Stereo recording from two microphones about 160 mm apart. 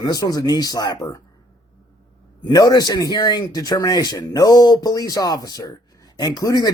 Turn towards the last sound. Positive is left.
turn(degrees=25)  # may be behind; listen again after turning